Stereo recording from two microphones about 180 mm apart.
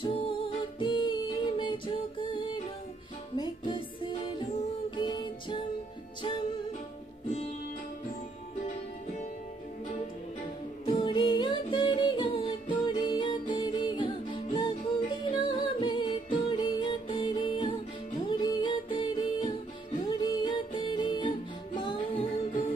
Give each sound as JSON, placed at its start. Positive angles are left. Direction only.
{"t": 0.0, "sound": "music", "side_deg": 30}
{"t": 10.9, "sound": "music", "side_deg": 30}